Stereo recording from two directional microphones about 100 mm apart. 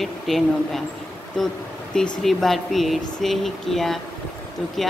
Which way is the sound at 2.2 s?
Centre (ahead or behind).